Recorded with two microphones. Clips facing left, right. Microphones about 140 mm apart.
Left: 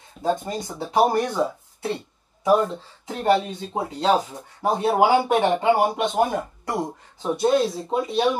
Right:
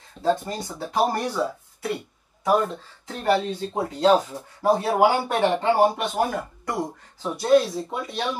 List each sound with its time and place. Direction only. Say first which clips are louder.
0.3 s speech: right 1 dB; 20° left (ahead or behind)
3.6 s speech: right 2 dB; 10° left (ahead or behind)
4.6 s speech: even; 20° left (ahead or behind)